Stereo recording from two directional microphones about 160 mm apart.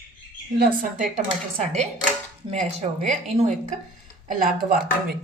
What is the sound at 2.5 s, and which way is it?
A woman's voice, 45° right (ahead or behind).